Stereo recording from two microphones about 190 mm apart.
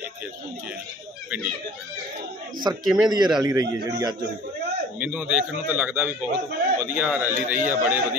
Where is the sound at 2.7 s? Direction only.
20° right (ahead or behind).